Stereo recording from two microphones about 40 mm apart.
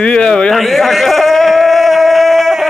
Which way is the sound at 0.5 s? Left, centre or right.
Centre.